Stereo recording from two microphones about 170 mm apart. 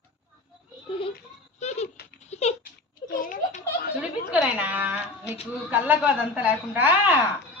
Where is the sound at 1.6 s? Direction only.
40° left (ahead or behind).